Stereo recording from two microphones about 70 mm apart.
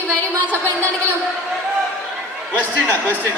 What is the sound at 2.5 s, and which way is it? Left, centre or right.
Speech, left.